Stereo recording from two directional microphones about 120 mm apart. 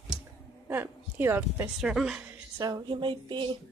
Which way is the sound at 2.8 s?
45° right (ahead or behind).